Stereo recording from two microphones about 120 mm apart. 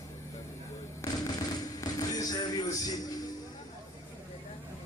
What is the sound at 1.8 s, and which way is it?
Music, 30° left (ahead or behind).